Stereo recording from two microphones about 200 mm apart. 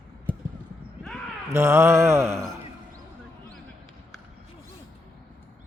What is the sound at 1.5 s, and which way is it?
Mantra, 15° right (ahead or behind).